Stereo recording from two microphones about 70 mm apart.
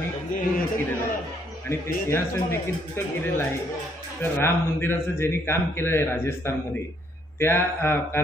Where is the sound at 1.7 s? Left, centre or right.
Left.